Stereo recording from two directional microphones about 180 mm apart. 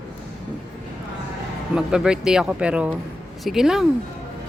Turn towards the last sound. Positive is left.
turn(degrees=-5)  # may be behind; listen again after turning